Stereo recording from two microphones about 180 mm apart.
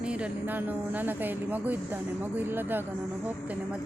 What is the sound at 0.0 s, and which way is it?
Speech, 5° right (ahead or behind).